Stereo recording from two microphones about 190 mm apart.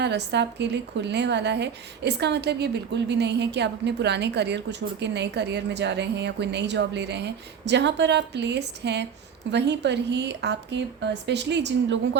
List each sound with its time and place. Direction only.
0.0 s a woman's voice: 65° right (ahead or behind)